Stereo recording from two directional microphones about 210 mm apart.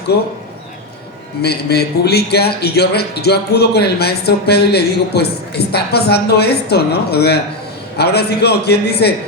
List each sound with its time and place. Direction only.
0.1 s speech: 50° left (ahead or behind)
1.4 s speech: 50° left (ahead or behind)